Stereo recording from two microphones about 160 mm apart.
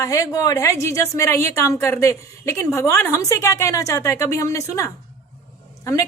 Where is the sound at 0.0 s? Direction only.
20° left (ahead or behind).